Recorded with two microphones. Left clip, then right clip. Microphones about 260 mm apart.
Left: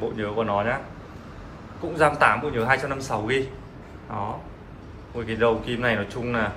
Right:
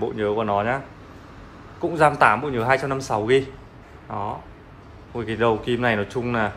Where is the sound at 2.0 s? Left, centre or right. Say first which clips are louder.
Right 2 dB; centre.